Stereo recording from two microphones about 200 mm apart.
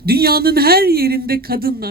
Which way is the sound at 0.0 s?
50° right (ahead or behind).